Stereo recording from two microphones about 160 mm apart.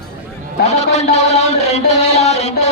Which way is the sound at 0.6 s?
45° left (ahead or behind).